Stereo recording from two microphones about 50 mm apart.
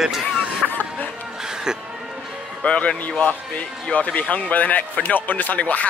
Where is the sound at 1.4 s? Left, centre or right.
Centre.